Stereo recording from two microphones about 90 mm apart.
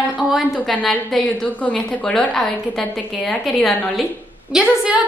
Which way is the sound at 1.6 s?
10° left (ahead or behind).